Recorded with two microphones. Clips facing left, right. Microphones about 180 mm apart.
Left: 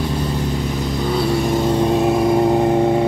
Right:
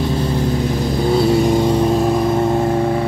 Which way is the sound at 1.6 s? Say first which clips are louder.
Right 1 dB; 10° right (ahead or behind).